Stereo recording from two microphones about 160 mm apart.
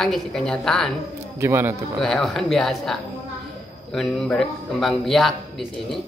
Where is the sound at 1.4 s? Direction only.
15° right (ahead or behind).